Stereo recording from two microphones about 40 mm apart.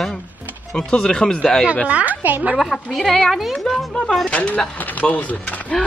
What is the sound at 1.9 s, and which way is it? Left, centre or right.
Speech, right.